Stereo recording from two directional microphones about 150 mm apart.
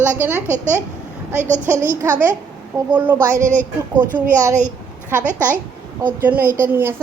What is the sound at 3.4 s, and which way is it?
Speech, 60° right (ahead or behind).